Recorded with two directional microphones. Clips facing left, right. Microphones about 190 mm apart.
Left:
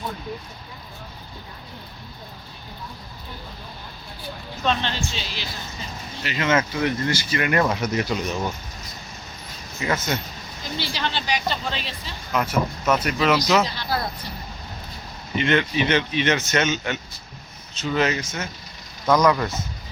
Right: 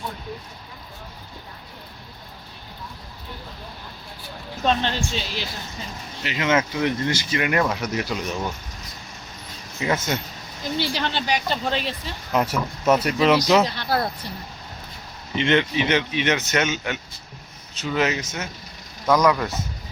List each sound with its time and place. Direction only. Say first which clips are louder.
4.6 s speech: right 2 dB; 40° right (ahead or behind)
6.2 s speech: even; 15° right (ahead or behind)
7.6 s speech: left 2 dB; centre (ahead or behind)
10.8 s speech: right 2 dB; 50° right (ahead or behind)
12.3 s speech: even; 35° right (ahead or behind)
13.7 s speech: right 3 dB; 60° right (ahead or behind)
15.4 s speech: right 1 dB; 20° right (ahead or behind)
19.1 s speech: even; 5° right (ahead or behind)